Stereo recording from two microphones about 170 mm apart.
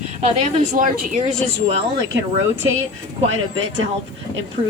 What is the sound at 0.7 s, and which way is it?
Speech, 50° right (ahead or behind).